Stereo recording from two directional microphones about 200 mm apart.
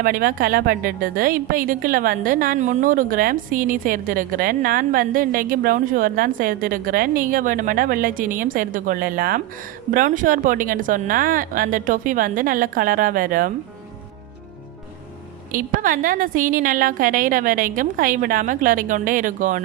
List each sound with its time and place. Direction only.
0.0 s a woman's voice: 45° right (ahead or behind)
15.5 s a woman's voice: 40° right (ahead or behind)